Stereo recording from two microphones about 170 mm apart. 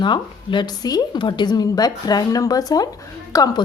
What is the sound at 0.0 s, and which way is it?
A woman's voice, 25° left (ahead or behind).